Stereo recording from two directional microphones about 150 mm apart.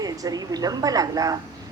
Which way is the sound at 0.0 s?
25° right (ahead or behind).